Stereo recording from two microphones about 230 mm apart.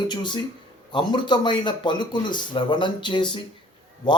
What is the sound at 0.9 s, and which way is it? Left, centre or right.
Speech, centre.